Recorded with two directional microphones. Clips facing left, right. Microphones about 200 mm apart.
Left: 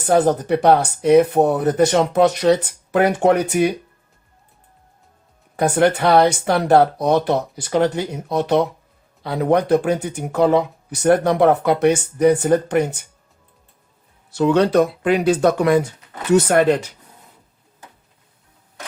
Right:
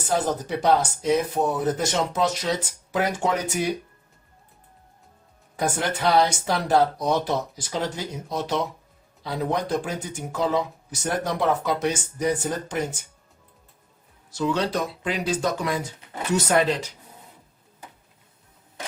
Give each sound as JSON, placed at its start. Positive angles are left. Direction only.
{"t": 0.0, "sound": "speech", "side_deg": 60}
{"t": 5.5, "sound": "speech", "side_deg": 60}
{"t": 14.3, "sound": "speech", "side_deg": 60}